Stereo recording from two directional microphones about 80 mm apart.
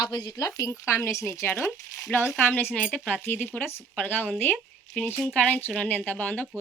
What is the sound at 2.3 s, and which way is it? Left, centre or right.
Speech, centre.